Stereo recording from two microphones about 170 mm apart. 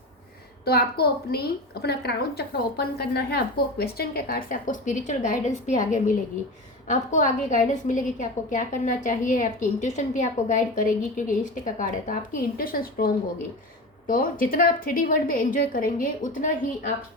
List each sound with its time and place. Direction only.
0.6 s a woman's voice: 65° left (ahead or behind)
14.1 s a woman's voice: 55° left (ahead or behind)